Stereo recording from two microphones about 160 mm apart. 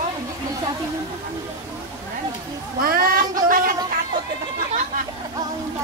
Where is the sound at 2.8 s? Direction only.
65° right (ahead or behind).